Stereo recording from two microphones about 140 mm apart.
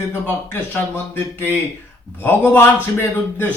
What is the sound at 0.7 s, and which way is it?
Speech, 15° left (ahead or behind).